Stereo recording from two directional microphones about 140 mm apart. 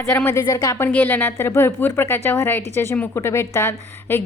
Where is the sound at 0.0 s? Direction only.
20° left (ahead or behind).